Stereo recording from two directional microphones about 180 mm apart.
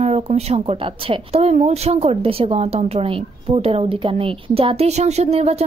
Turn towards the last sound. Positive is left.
turn(degrees=-35)  # may be behind; listen again after turning